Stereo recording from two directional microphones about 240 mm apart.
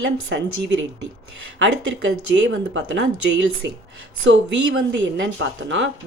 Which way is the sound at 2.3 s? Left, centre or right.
Right.